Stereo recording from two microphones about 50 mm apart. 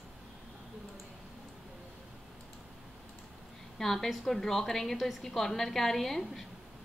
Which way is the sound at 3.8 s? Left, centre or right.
Centre.